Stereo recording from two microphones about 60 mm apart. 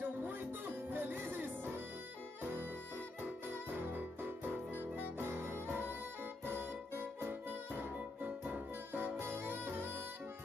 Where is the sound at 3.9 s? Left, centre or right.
Right.